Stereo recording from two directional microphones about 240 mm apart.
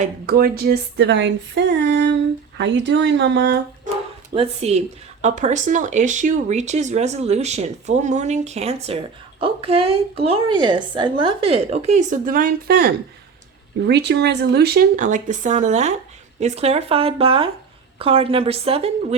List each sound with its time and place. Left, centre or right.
0.0 s speech: right
4.4 s speech: right